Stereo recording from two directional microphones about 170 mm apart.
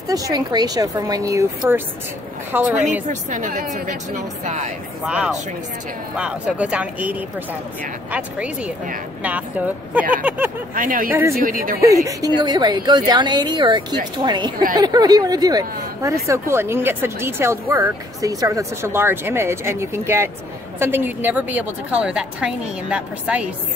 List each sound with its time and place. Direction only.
0.1 s a woman's voice: 20° right (ahead or behind)
3.1 s a woman's voice: 50° right (ahead or behind)
5.0 s speech: 5° right (ahead or behind)
10.1 s speech: 10° right (ahead or behind)
10.7 s a woman's voice: 55° right (ahead or behind)
11.1 s speech: 10° right (ahead or behind)
11.3 s a woman's voice: 55° right (ahead or behind)
11.8 s a woman's voice: 20° right (ahead or behind)